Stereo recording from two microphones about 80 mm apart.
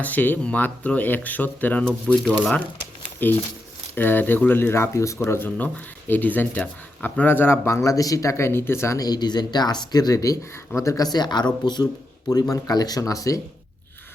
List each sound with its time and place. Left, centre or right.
0.0 s speech: left
1.8 s speech: centre
3.2 s speech: left
5.4 s speech: centre; by 9.0 s left
9.0 s speech: left
12.3 s speech: left